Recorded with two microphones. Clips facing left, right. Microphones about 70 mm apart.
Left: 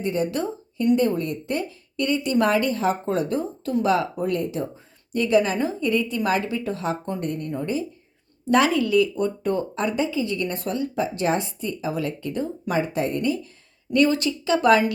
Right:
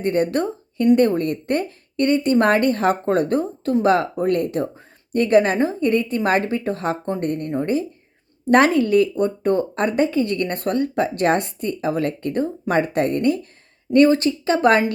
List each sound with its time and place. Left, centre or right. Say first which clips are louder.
0.0 s a woman's voice: right 5 dB; right
13.9 s speech: right 5 dB; right